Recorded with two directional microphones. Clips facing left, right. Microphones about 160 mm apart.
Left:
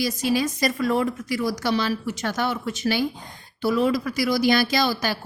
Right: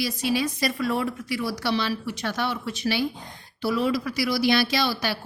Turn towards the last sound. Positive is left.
turn(degrees=45)  # may be behind; listen again after turning